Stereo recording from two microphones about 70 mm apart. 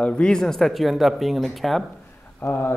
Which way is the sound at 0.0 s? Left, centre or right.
Centre.